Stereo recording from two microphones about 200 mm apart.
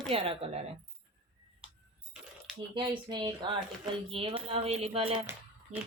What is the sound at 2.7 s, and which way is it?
Speech, 25° right (ahead or behind).